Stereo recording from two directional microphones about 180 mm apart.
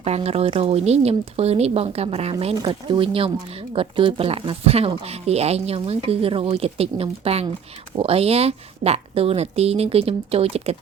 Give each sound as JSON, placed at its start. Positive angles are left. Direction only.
{"t": 0.0, "sound": "speech", "side_deg": -35}